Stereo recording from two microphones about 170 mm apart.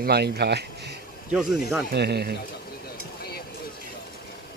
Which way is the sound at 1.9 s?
75° right (ahead or behind).